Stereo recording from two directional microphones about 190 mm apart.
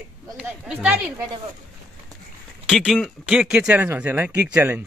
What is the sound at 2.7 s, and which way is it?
Speech, centre (ahead or behind).